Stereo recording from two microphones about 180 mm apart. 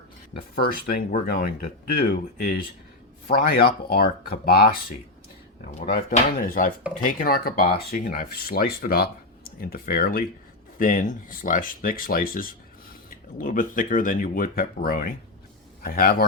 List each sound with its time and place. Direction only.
0.6 s speech: 55° left (ahead or behind)